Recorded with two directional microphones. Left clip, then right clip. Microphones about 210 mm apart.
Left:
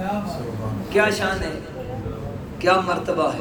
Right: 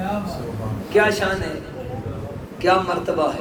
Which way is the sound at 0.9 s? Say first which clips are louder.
Right 2 dB; 50° left (ahead or behind).